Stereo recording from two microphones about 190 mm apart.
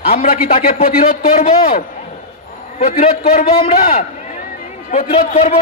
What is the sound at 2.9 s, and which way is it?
Speech, 35° left (ahead or behind).